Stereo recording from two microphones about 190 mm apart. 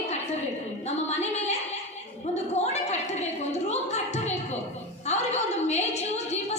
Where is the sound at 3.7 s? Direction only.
35° left (ahead or behind).